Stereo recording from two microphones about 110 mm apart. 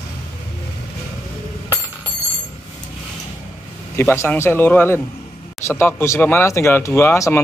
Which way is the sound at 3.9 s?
25° left (ahead or behind).